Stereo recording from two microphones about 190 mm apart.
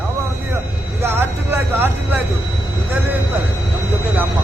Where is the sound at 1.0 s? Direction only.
10° right (ahead or behind).